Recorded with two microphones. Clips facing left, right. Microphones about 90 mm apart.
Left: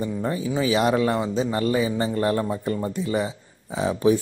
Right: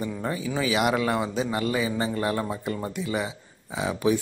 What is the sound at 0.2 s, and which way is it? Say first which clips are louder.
Speech: left 3 dB; 30° left (ahead or behind).